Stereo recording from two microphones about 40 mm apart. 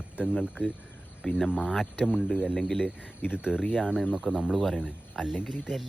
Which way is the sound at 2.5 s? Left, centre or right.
Centre.